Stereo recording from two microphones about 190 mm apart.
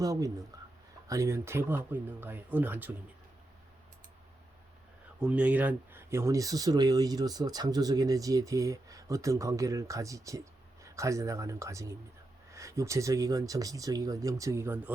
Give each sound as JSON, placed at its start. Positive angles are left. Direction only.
{"t": 0.0, "sound": "speech", "side_deg": -15}
{"t": 0.5, "sound": "a sound", "side_deg": -20}
{"t": 1.0, "sound": "speech", "side_deg": -15}
{"t": 5.2, "sound": "speech", "side_deg": -5}